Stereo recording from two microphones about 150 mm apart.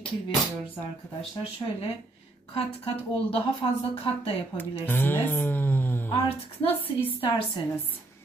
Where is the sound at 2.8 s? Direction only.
40° left (ahead or behind).